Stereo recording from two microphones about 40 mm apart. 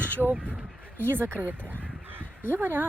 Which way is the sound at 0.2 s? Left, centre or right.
Centre.